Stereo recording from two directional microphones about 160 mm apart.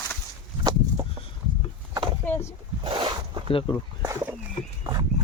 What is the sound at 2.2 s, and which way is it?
Boat, 10° left (ahead or behind).